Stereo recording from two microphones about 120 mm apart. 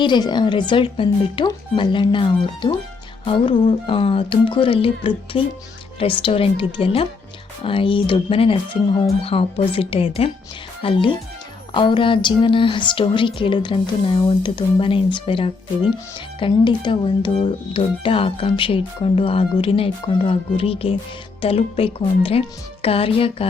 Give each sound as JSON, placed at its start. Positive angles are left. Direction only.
{"t": 0.0, "sound": "speech", "side_deg": 40}